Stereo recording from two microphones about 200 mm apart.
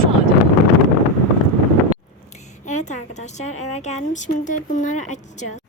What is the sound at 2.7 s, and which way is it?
A woman's voice, 35° left (ahead or behind).